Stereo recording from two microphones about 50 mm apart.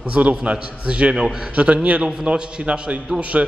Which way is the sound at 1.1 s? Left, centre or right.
Centre.